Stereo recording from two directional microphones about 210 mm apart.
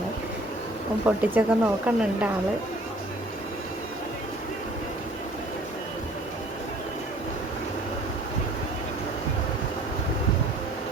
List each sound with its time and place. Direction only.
1.0 s speech: 10° right (ahead or behind)